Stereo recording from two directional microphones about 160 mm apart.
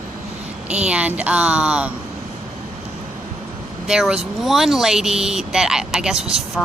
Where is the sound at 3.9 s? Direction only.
5° right (ahead or behind).